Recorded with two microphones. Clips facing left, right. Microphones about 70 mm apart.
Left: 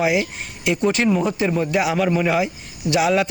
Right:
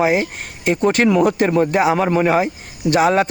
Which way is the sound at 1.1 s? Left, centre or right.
Right.